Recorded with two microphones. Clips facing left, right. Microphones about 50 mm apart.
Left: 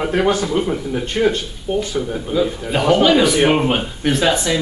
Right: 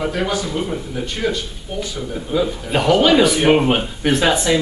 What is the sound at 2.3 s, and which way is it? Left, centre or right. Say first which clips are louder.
Speech: even; centre.